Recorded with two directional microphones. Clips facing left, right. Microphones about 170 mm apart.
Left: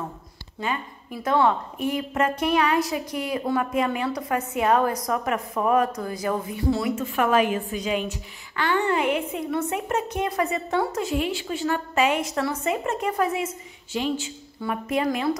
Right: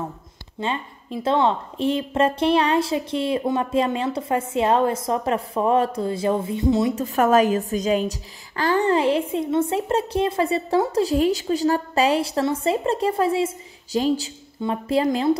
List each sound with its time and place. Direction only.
0.6 s a woman's voice: 25° right (ahead or behind)
7.0 s a woman's voice: 40° right (ahead or behind)